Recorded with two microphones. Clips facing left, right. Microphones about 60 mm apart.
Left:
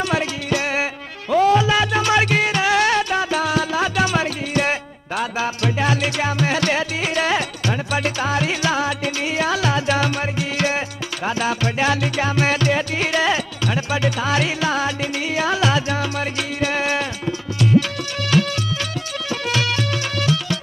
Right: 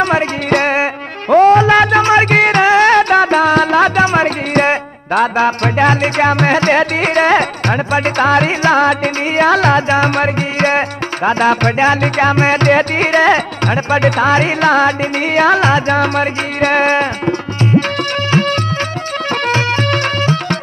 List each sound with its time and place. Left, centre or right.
0.0 s music: right
2.0 s music: right
2.3 s music: right
4.0 s music: right